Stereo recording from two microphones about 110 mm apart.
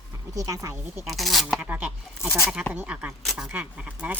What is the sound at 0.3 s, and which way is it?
Speech, 30° right (ahead or behind).